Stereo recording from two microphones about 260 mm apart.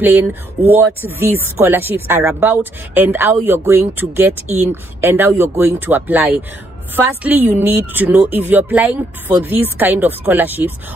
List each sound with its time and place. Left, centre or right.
0.0 s speech: centre